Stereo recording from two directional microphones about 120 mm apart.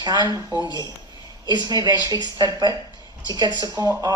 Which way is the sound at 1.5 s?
35° right (ahead or behind).